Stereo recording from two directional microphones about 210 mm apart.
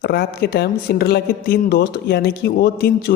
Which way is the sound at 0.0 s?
45° left (ahead or behind).